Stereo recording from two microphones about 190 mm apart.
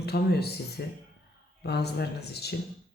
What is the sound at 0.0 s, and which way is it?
Speech, 60° left (ahead or behind).